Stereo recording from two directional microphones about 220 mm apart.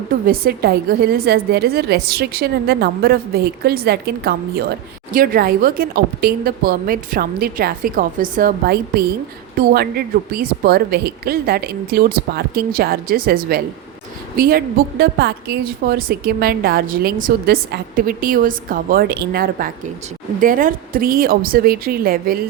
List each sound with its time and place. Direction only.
0.3 s a woman's voice: 45° right (ahead or behind)